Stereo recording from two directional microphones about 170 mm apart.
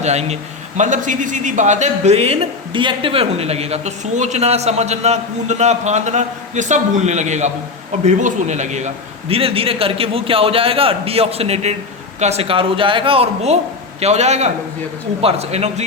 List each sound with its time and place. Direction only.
0.0 s a man's voice: 40° right (ahead or behind)